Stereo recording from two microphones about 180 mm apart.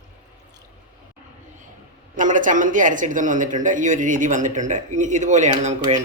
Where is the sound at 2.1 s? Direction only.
45° right (ahead or behind).